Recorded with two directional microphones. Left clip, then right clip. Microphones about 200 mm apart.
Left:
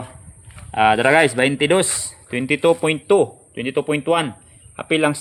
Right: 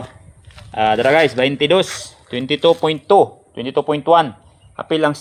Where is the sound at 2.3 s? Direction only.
25° left (ahead or behind).